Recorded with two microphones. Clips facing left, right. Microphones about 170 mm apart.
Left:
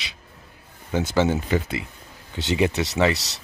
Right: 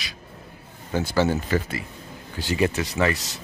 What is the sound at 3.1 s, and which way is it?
Speech, 80° left.